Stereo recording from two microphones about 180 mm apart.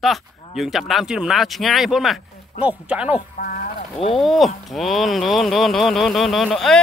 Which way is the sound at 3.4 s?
50° left (ahead or behind).